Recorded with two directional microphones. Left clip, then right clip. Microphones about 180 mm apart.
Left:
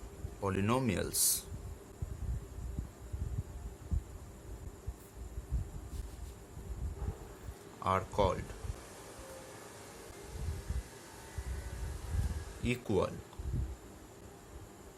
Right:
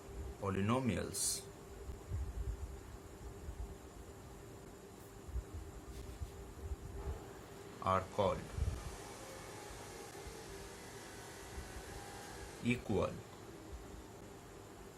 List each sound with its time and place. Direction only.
0.4 s a man's voice: 60° left (ahead or behind)
7.9 s a sound: 55° left (ahead or behind)
12.6 s a man's voice: 60° left (ahead or behind)